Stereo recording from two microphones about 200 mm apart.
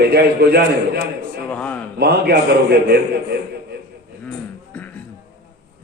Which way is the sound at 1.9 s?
55° right (ahead or behind).